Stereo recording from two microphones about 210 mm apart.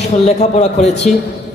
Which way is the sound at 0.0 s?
35° left (ahead or behind).